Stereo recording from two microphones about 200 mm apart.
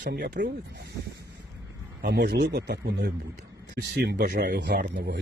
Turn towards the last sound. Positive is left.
turn(degrees=-45)  # may be behind; listen again after turning